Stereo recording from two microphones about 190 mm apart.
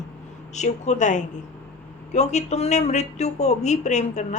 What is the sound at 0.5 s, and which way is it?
Speech, 35° left (ahead or behind).